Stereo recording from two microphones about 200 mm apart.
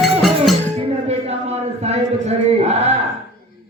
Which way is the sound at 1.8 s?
30° right (ahead or behind).